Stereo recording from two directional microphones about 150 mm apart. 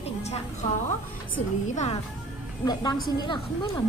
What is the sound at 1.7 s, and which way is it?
Speech, 50° left (ahead or behind).